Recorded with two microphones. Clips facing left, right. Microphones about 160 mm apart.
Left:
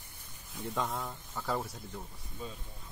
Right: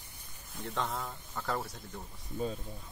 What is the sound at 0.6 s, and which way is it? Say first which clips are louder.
Speech: left 1 dB; centre (ahead or behind).